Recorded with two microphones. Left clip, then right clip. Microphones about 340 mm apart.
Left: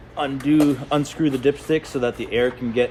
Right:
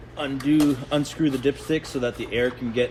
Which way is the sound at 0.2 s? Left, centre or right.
Centre.